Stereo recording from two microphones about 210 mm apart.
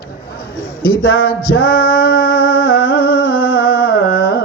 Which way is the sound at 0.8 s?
50° left (ahead or behind).